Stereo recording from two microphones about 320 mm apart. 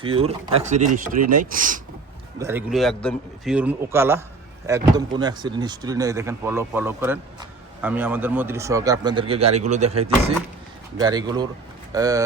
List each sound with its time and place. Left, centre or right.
0.0 s speech: centre
2.4 s a man's voice: centre